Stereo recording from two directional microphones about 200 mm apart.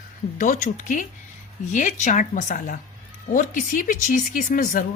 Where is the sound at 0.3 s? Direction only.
40° left (ahead or behind).